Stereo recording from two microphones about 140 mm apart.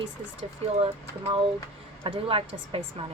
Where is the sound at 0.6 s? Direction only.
40° right (ahead or behind).